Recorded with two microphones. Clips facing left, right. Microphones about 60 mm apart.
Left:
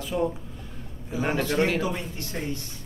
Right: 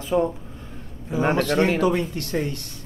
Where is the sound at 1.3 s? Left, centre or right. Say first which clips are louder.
Right 2 dB; right.